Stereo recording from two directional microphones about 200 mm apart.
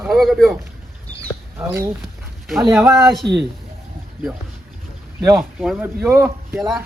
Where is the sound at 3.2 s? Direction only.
60° right (ahead or behind).